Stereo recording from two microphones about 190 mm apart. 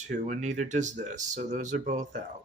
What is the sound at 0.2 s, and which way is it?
Speech, 40° right (ahead or behind).